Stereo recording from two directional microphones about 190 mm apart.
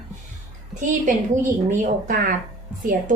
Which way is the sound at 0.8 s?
40° right (ahead or behind).